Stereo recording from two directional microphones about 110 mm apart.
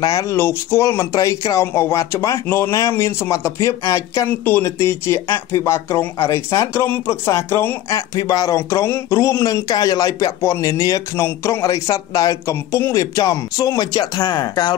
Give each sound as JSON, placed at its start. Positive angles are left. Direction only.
{"t": 0.0, "sound": "speech", "side_deg": 35}